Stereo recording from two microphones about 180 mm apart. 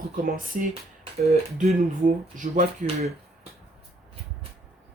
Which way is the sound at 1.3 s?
45° right (ahead or behind).